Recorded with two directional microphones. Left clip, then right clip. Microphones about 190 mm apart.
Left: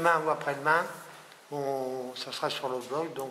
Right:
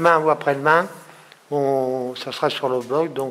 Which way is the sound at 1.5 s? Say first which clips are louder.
Right 12 dB; 30° right (ahead or behind).